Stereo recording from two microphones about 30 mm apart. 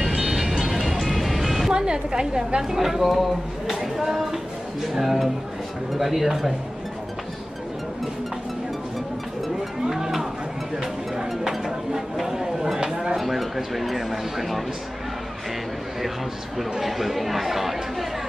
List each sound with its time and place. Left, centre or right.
0.0 s music: centre
1.7 s a woman's voice: right
3.0 s speech: centre
9.8 s music: centre
11.5 s a sound: centre
13.2 s speech: centre
16.8 s speech: centre